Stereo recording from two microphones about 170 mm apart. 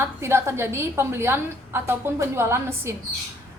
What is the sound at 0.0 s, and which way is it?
A woman's voice, 15° right (ahead or behind).